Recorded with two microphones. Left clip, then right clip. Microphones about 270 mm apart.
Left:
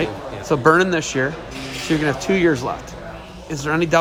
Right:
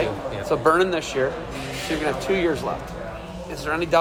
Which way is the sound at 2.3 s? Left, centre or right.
Left.